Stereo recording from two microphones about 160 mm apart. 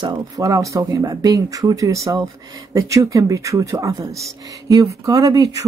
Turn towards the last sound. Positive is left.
turn(degrees=-20)  # may be behind; listen again after turning